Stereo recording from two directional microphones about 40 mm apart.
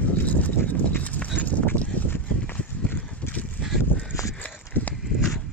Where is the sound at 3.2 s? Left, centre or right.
Left.